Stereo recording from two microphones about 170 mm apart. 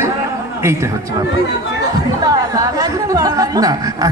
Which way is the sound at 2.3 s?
20° right (ahead or behind).